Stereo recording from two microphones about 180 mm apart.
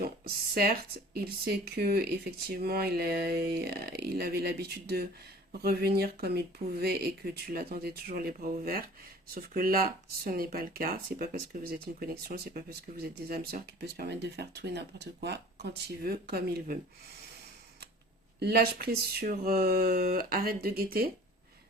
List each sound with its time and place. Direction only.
0.0 s speech: 55° right (ahead or behind)
18.3 s speech: 60° right (ahead or behind)